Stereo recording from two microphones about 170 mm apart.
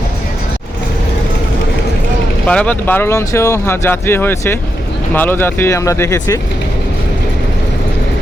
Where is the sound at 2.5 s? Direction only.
10° left (ahead or behind).